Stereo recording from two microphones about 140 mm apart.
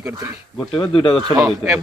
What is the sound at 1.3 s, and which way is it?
Speech, 25° right (ahead or behind).